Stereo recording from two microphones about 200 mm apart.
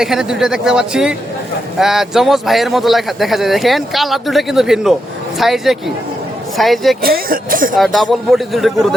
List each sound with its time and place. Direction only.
0.0 s speech: centre (ahead or behind)
7.0 s speech: 45° right (ahead or behind)
7.8 s speech: centre (ahead or behind)